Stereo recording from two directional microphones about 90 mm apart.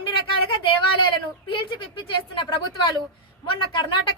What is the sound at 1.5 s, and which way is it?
A woman's voice, 75° left (ahead or behind).